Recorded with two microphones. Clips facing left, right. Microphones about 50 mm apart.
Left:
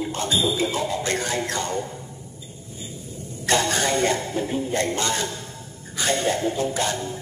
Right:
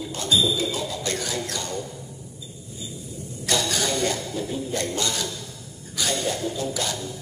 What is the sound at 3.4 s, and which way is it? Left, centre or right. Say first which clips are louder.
A man's voice: left 4 dB; left.